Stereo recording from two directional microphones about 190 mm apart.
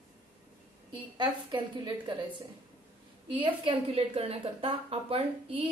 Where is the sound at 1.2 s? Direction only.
25° right (ahead or behind).